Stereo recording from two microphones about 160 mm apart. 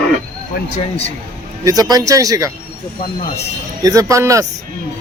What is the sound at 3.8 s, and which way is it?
Speech, 20° right (ahead or behind).